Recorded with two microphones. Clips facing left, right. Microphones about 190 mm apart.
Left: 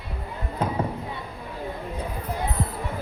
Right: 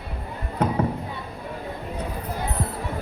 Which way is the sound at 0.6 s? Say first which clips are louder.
Right 3 dB; 70° right (ahead or behind).